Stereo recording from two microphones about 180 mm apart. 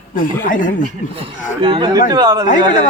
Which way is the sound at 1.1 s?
30° right (ahead or behind).